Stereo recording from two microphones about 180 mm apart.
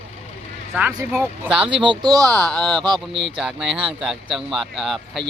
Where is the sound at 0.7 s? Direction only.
5° right (ahead or behind).